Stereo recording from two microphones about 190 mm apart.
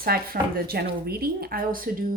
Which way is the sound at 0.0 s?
50° right (ahead or behind).